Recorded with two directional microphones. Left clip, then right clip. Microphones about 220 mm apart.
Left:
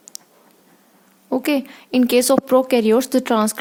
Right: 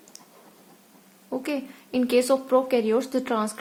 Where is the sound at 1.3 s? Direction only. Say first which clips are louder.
Left 9 dB; 45° left (ahead or behind).